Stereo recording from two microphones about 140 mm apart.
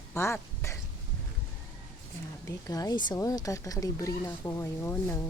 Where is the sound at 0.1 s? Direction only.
20° left (ahead or behind).